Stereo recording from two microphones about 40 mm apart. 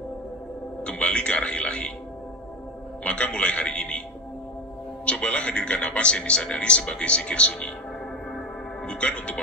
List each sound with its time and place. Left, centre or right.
0.8 s a man's voice: left
3.0 s music: left
3.3 s a man's voice: left
5.0 s a man's voice: left
8.8 s a man's voice: left